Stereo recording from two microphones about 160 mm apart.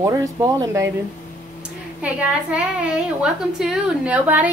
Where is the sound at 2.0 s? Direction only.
5° right (ahead or behind).